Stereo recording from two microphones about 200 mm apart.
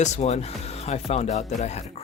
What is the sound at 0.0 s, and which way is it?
Speech, 35° left (ahead or behind).